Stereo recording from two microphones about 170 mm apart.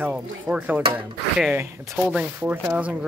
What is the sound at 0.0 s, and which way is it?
Speech, 5° right (ahead or behind).